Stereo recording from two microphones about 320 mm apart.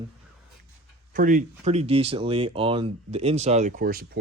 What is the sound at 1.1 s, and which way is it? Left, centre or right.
Speech, right.